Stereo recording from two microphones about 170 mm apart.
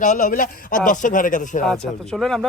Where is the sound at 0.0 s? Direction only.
50° left (ahead or behind).